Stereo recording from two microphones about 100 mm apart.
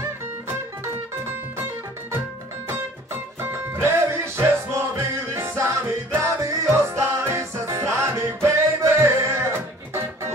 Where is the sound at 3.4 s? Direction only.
25° right (ahead or behind).